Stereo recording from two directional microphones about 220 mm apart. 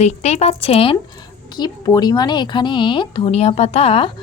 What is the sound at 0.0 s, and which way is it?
A woman's voice, 30° left (ahead or behind).